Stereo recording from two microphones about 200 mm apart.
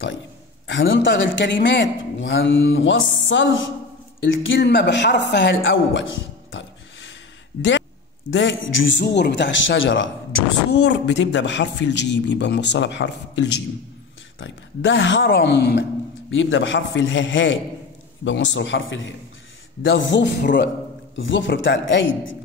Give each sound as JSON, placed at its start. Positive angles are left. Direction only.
{"t": 0.7, "sound": "a man's voice", "side_deg": 65}
{"t": 8.3, "sound": "a man's voice", "side_deg": 65}
{"t": 16.3, "sound": "a man's voice", "side_deg": 70}